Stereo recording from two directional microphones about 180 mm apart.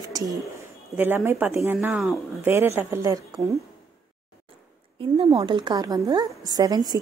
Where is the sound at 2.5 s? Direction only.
15° right (ahead or behind).